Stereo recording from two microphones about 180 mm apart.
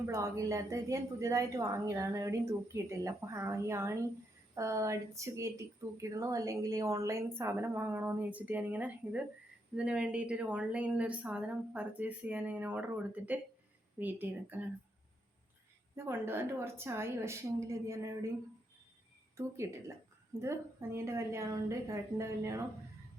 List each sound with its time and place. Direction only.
0.1 s speech: 15° right (ahead or behind)
16.0 s speech: 15° right (ahead or behind)
20.4 s speech: 15° right (ahead or behind)